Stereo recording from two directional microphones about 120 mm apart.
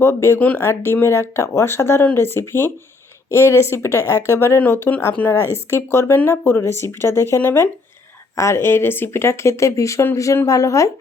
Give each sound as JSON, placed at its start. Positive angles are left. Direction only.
{"t": 0.0, "sound": "speech", "side_deg": 20}